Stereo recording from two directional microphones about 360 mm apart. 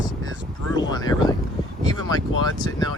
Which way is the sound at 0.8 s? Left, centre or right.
Centre.